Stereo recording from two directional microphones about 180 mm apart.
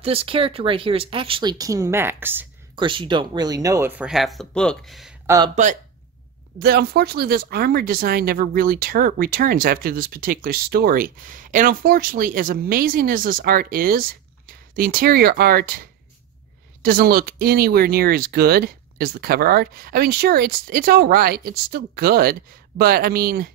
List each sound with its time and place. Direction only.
0.0 s speech: 30° right (ahead or behind); by 2.4 s 10° right (ahead or behind)
2.7 s speech: 25° right (ahead or behind); by 5.1 s centre (ahead or behind)
5.2 s speech: 20° right (ahead or behind)
6.6 s speech: 60° right (ahead or behind)